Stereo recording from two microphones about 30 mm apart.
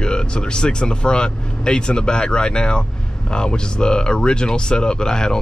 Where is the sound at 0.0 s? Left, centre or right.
Left.